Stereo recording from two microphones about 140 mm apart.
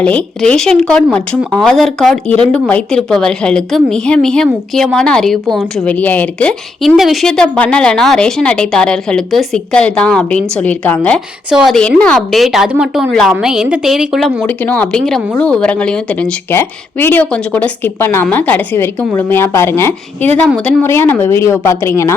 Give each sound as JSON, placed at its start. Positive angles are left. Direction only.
{"t": 0.0, "sound": "a woman's voice", "side_deg": 10}
{"t": 14.4, "sound": "a woman's voice", "side_deg": 10}